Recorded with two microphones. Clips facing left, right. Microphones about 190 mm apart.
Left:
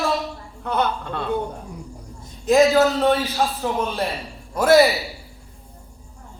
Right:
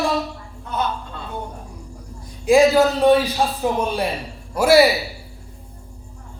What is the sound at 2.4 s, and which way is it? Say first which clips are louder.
A man's voice: right 1 dB; 10° right (ahead or behind).